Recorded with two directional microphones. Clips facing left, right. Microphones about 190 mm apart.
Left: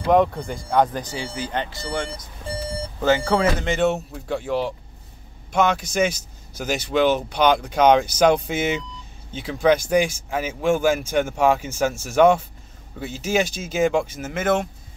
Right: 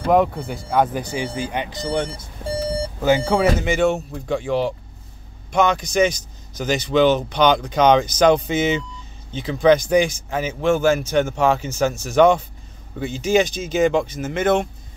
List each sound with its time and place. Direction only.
0.1 s speech: 5° right (ahead or behind)
1.1 s speech: 15° right (ahead or behind)
3.3 s speech: 10° right (ahead or behind)
3.7 s speech: centre (ahead or behind)